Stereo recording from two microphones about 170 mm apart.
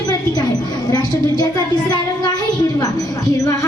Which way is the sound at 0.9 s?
25° left (ahead or behind).